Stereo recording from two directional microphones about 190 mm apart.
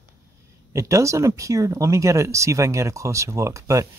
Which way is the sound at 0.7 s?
15° right (ahead or behind).